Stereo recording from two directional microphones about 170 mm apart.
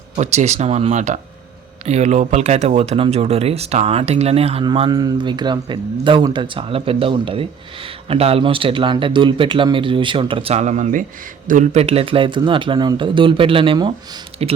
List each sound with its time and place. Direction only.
0.2 s speech: 40° right (ahead or behind)